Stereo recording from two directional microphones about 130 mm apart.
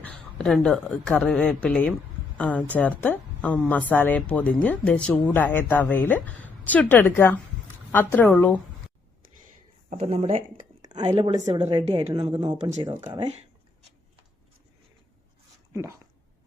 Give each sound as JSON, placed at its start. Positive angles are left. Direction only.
{"t": 0.0, "sound": "speech", "side_deg": 5}
{"t": 10.0, "sound": "a woman's voice", "side_deg": -55}
{"t": 10.8, "sound": "speech", "side_deg": -35}
{"t": 11.5, "sound": "a woman's voice", "side_deg": -50}
{"t": 12.1, "sound": "speech", "side_deg": -30}
{"t": 15.7, "sound": "speech", "side_deg": -20}